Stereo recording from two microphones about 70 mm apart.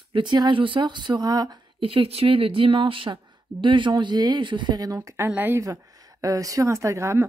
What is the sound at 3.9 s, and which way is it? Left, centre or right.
Speech, right.